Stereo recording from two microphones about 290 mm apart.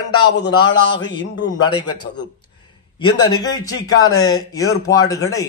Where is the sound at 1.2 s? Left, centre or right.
Left.